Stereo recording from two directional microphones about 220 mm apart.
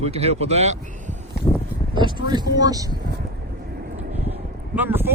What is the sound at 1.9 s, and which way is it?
Speech, 20° right (ahead or behind).